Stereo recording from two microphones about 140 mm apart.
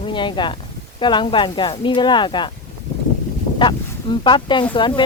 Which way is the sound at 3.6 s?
35° left (ahead or behind).